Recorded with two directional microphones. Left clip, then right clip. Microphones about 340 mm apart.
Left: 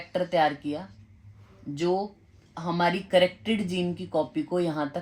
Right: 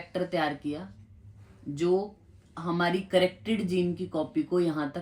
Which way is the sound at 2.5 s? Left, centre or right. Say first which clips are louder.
Left 2 dB; left.